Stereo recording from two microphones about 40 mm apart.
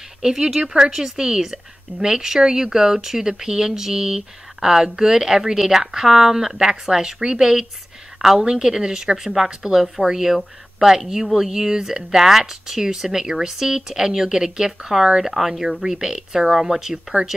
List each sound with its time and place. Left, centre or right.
0.2 s a woman's voice: centre